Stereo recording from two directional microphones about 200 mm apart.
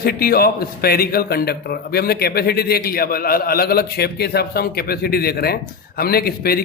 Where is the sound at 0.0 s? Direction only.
50° left (ahead or behind).